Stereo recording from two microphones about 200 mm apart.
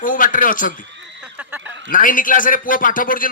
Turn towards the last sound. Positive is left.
turn(degrees=45)  # may be behind; listen again after turning